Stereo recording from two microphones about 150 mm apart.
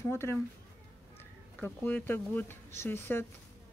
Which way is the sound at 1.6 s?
10° left (ahead or behind).